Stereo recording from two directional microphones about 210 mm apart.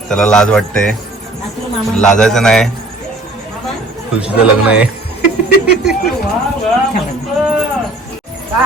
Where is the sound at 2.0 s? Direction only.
5° left (ahead or behind).